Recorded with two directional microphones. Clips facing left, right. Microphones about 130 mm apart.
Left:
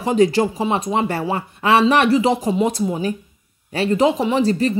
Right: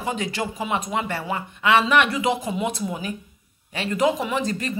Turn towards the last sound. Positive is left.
turn(degrees=35)  # may be behind; listen again after turning